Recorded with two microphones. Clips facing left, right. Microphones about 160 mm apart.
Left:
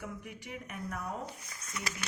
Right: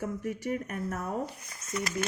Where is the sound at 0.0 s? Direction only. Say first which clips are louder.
Right 10 dB; 45° right (ahead or behind).